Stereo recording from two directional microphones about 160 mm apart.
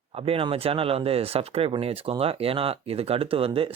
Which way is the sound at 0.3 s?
35° right (ahead or behind).